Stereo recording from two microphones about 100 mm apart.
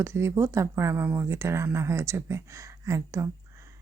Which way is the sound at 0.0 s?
30° right (ahead or behind).